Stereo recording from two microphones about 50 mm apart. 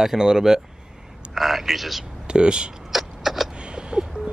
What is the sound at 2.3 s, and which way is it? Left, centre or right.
Speech, centre.